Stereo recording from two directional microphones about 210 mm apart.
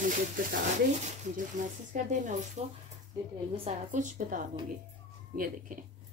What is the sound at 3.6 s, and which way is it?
Speech, 35° right (ahead or behind).